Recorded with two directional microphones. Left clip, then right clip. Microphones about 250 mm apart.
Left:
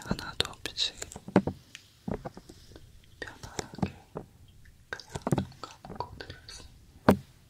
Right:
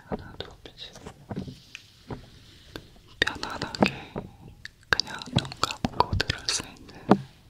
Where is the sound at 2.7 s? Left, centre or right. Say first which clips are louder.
Right 17 dB; right.